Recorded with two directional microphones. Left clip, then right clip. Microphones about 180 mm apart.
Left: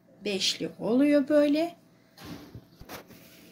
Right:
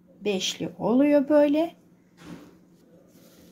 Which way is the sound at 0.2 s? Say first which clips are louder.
Right 1 dB; 45° right (ahead or behind).